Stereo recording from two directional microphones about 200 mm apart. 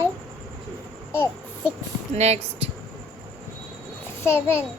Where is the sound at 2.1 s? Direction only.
35° right (ahead or behind).